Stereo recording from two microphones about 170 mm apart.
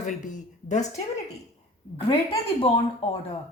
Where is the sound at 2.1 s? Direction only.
30° left (ahead or behind).